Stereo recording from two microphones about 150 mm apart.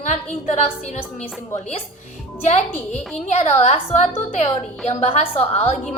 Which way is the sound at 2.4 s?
50° left (ahead or behind).